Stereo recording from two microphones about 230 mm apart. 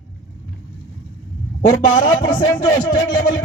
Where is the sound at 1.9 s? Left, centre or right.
Left.